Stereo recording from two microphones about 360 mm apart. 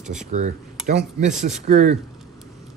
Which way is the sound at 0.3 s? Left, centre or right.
Centre.